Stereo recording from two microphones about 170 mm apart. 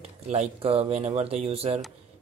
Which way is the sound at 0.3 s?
35° right (ahead or behind).